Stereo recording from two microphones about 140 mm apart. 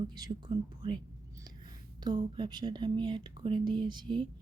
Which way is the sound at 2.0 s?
30° right (ahead or behind).